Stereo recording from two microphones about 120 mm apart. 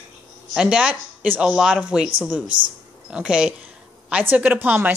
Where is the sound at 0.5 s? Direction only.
10° right (ahead or behind).